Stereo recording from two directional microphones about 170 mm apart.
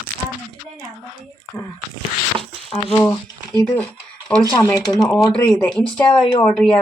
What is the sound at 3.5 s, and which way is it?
Speech, 5° left (ahead or behind).